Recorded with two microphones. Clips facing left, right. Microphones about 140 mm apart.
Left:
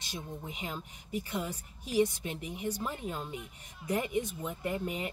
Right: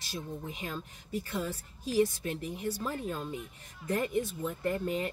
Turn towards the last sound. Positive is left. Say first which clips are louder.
# right 3 dB
turn(degrees=15)  # may be behind; listen again after turning